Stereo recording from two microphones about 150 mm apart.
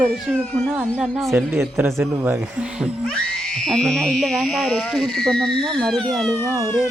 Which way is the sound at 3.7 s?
5° left (ahead or behind).